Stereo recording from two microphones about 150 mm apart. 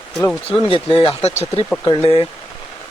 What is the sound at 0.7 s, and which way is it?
Speech, 35° left (ahead or behind).